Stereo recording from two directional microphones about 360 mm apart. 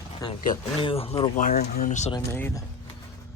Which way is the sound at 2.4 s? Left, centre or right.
Centre.